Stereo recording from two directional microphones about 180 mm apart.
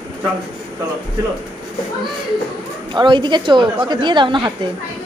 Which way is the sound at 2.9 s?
25° right (ahead or behind).